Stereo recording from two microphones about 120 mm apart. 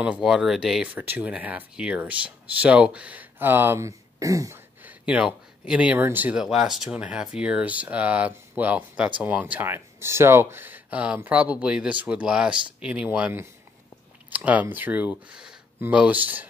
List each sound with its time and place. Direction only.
0.0 s speech: 5° right (ahead or behind); by 4.6 s 25° right (ahead or behind)
4.8 s speech: 10° right (ahead or behind)
6.4 s speech: 5° right (ahead or behind)